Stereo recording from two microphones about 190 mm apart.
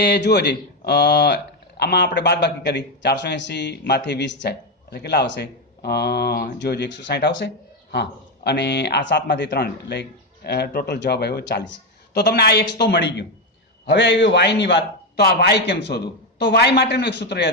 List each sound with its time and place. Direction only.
0.0 s a man's voice: 60° left (ahead or behind)